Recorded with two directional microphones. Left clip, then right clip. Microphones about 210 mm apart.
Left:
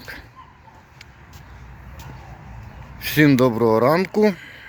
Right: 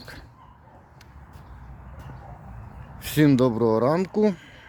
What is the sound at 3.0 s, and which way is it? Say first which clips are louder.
Speech: left 4 dB; 15° right (ahead or behind).